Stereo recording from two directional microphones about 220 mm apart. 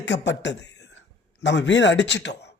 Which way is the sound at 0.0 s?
55° left (ahead or behind).